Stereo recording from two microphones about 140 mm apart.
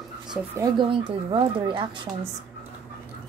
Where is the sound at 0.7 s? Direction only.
40° right (ahead or behind).